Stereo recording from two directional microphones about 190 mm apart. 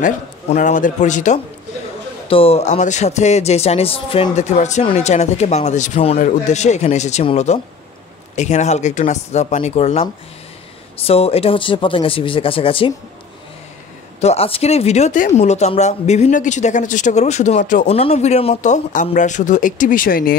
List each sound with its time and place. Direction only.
0.0 s speech: 40° left (ahead or behind)
14.2 s speech: 30° left (ahead or behind); by 20.3 s 50° left (ahead or behind)